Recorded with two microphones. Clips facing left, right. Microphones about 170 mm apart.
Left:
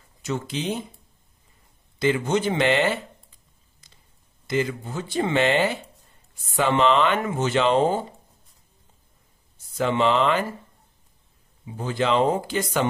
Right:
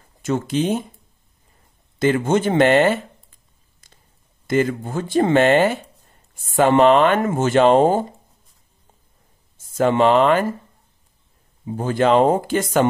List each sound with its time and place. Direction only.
0.2 s speech: 50° right (ahead or behind)
2.0 s speech: 50° right (ahead or behind)
4.5 s speech: 50° right (ahead or behind)
9.8 s speech: 50° right (ahead or behind)
11.6 s speech: 50° right (ahead or behind)